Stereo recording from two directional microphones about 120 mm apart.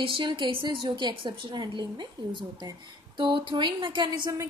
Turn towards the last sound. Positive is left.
turn(degrees=-40)  # may be behind; listen again after turning